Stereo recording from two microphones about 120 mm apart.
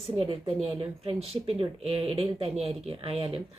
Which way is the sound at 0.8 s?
55° right (ahead or behind).